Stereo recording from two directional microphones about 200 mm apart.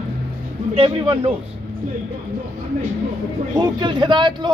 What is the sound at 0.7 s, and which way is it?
Speech, 30° right (ahead or behind).